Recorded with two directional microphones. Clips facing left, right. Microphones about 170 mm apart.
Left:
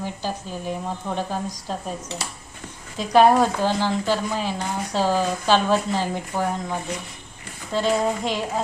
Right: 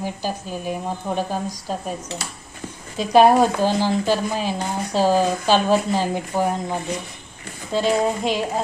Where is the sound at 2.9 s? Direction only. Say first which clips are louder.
Right 2 dB; 10° right (ahead or behind).